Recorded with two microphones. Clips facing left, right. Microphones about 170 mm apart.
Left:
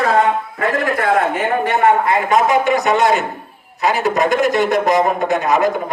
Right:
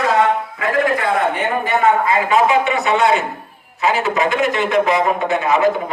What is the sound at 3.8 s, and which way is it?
A man's voice, 40° left (ahead or behind).